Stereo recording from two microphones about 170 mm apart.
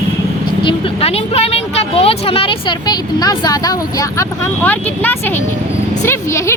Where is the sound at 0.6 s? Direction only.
35° left (ahead or behind); by 5.4 s 10° left (ahead or behind).